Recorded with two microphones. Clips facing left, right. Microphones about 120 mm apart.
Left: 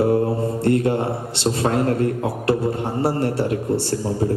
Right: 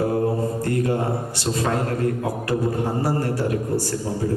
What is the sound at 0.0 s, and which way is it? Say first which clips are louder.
Mantra: left 3 dB; 25° left (ahead or behind).